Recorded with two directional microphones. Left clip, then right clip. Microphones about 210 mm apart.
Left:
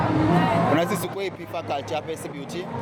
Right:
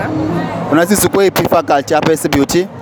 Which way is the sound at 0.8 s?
45° right (ahead or behind).